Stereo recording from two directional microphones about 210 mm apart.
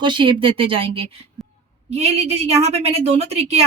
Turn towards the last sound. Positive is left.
turn(degrees=-30)  # may be behind; listen again after turning